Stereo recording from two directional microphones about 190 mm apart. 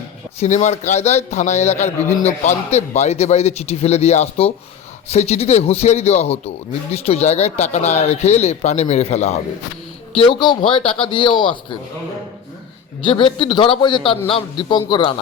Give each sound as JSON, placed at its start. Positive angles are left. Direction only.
{"t": 0.3, "sound": "speech", "side_deg": 40}
{"t": 10.2, "sound": "a man's voice", "side_deg": 25}
{"t": 13.0, "sound": "a man's voice", "side_deg": 25}